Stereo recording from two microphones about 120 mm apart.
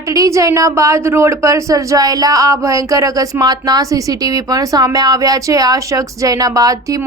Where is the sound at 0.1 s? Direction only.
25° right (ahead or behind).